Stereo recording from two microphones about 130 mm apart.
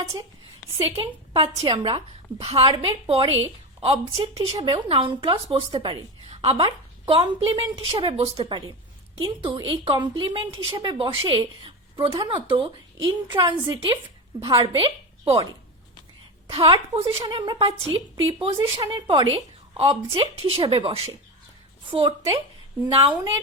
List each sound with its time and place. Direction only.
0.8 s a woman's voice: 45° right (ahead or behind)
16.5 s a woman's voice: 45° right (ahead or behind)
17.2 s a woman's voice: 35° right (ahead or behind)